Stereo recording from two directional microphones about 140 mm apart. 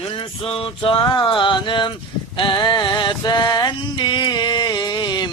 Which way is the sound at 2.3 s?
35° left (ahead or behind).